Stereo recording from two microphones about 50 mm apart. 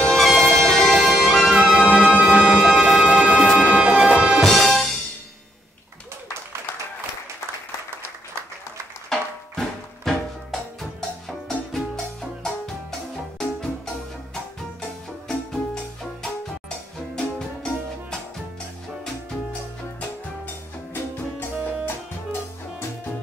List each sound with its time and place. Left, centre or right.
0.1 s music: centre
1.6 s music: right
3.0 s music: right
4.4 s music: centre
9.1 s music: centre
21.8 s music: left